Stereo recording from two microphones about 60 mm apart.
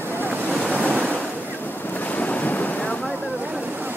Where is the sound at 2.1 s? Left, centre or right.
Left.